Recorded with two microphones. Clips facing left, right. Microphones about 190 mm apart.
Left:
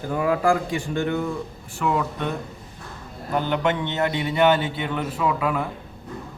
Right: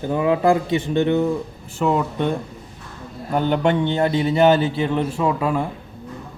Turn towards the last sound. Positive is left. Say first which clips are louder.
# right 3 dB
turn(degrees=-30)  # may be behind; listen again after turning